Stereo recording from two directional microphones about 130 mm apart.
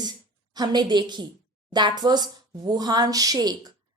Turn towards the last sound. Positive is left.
turn(degrees=-30)  # may be behind; listen again after turning